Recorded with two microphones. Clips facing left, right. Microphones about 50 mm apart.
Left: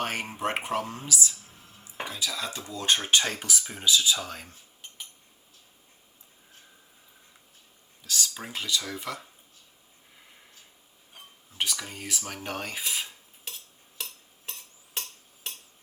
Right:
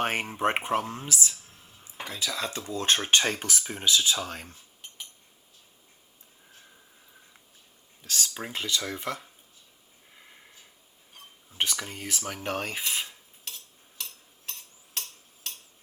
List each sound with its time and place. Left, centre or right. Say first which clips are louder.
0.0 s speech: right 3 dB; right
8.0 s speech: even; right
11.5 s speech: right 1 dB; right
11.8 s speech: right 1 dB; right
14.0 s a sound: left 2 dB; centre